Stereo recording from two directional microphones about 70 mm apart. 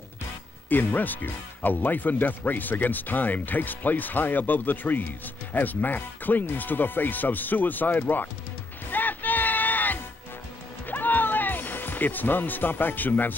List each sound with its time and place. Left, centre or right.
0.7 s speech: left
8.9 s music: left